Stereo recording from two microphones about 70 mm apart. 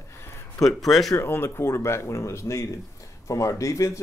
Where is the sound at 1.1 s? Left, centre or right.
Left.